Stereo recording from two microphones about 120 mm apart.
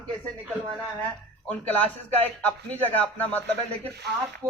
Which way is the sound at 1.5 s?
10° left (ahead or behind).